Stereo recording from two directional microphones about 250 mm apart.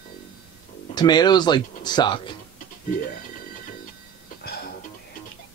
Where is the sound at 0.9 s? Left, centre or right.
Centre.